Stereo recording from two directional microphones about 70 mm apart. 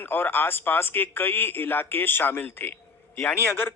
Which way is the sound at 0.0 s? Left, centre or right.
Left.